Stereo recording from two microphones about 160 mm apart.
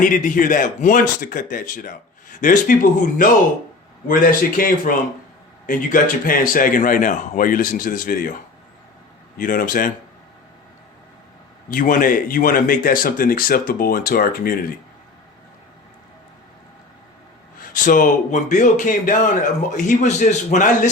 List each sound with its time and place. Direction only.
0.0 s speech: 55° left (ahead or behind)
9.4 s speech: 60° left (ahead or behind)
11.7 s speech: 60° left (ahead or behind)
17.6 s a man's voice: 55° left (ahead or behind)